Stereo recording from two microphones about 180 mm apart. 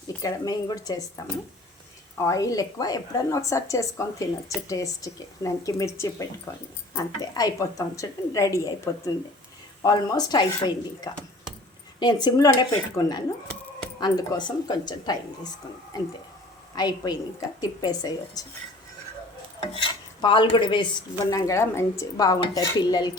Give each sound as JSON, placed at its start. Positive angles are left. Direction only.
{"t": 0.2, "sound": "dishes", "side_deg": 20}
{"t": 2.1, "sound": "a woman's voice", "side_deg": 15}
{"t": 6.9, "sound": "dishes", "side_deg": 20}
{"t": 16.7, "sound": "dishes", "side_deg": 20}
{"t": 19.5, "sound": "dishes", "side_deg": 25}